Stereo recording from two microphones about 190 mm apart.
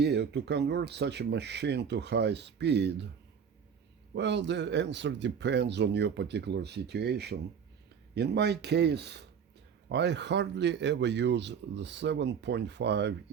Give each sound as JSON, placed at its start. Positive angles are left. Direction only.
{"t": 0.0, "sound": "speech", "side_deg": -60}
{"t": 4.1, "sound": "speech", "side_deg": -65}